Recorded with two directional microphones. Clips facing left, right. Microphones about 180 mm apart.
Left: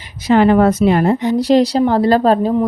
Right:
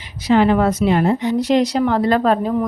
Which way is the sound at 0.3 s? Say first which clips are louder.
Left 3 dB; 50° left (ahead or behind).